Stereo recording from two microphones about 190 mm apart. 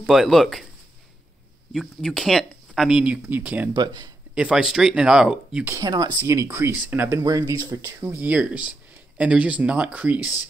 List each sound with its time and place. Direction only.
0.0 s speech: centre (ahead or behind)
1.7 s speech: centre (ahead or behind)
3.7 s speech: 20° right (ahead or behind)
4.4 s speech: 5° right (ahead or behind)
5.8 s speech: 20° right (ahead or behind)